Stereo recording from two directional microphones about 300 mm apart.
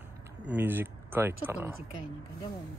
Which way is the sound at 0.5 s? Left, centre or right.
Centre.